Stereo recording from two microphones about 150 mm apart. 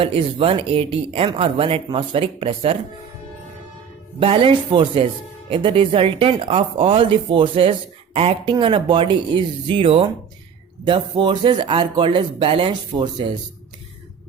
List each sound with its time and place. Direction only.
0.0 s speech: 35° right (ahead or behind)
4.2 s speech: 40° right (ahead or behind)